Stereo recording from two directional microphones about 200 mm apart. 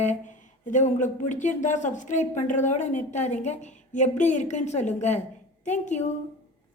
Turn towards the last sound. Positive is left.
turn(degrees=35)  # may be behind; listen again after turning